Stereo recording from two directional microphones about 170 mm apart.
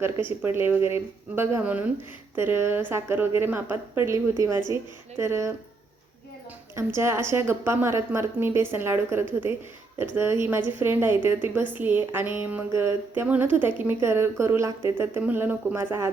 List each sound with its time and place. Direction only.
0.3 s a woman's voice: 15° right (ahead or behind)
6.7 s a woman's voice: 15° right (ahead or behind)